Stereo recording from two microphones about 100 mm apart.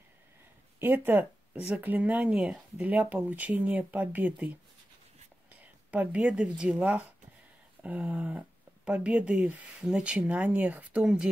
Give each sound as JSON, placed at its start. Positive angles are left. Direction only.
{"t": 0.7, "sound": "speech", "side_deg": -20}
{"t": 2.9, "sound": "speech", "side_deg": -15}
{"t": 5.5, "sound": "a sound", "side_deg": -15}
{"t": 6.6, "sound": "speech", "side_deg": -10}